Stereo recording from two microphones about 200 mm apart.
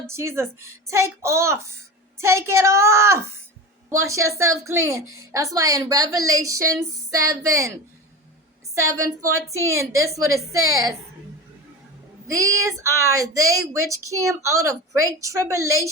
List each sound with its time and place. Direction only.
0.1 s a woman's voice: 15° right (ahead or behind)
8.7 s a woman's voice: 15° right (ahead or behind)
12.8 s a woman's voice: 15° right (ahead or behind)